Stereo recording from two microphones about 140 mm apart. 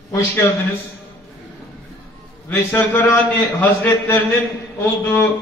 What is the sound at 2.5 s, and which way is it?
A man's voice, 15° left (ahead or behind).